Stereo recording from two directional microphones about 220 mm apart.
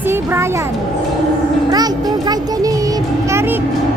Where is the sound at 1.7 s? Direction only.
20° right (ahead or behind).